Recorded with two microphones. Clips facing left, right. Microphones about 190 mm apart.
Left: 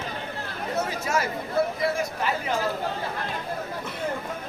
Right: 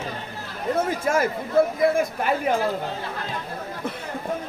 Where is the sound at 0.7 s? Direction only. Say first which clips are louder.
Right 4 dB; 50° right (ahead or behind).